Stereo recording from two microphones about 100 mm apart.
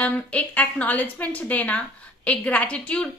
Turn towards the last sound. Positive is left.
turn(degrees=10)  # may be behind; listen again after turning